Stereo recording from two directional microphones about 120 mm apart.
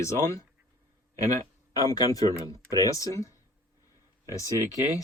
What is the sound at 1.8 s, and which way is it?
Speech, 30° left (ahead or behind).